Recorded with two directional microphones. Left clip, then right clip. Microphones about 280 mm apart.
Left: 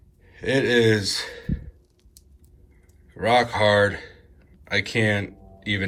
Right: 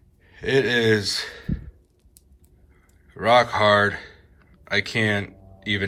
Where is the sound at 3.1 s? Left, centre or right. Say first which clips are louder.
Right 2 dB; centre.